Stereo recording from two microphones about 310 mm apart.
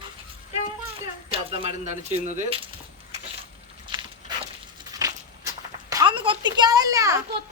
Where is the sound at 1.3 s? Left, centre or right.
Centre.